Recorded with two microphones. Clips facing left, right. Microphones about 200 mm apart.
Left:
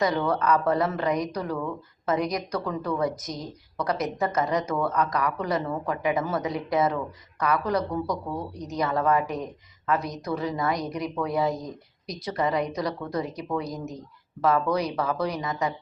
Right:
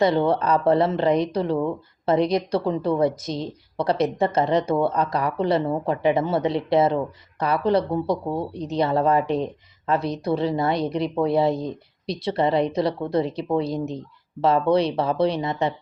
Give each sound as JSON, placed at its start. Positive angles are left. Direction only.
{"t": 0.0, "sound": "a woman's voice", "side_deg": -30}